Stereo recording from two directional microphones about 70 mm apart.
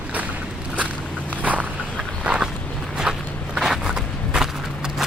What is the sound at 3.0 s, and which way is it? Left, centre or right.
Walk, centre.